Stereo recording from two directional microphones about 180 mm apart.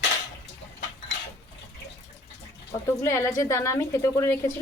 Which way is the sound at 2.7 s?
15° left (ahead or behind).